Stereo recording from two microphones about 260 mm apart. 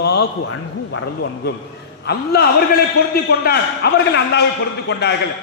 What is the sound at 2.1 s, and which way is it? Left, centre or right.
A man's voice, left.